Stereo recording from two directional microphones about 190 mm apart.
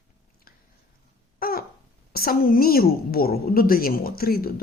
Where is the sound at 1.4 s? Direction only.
50° left (ahead or behind).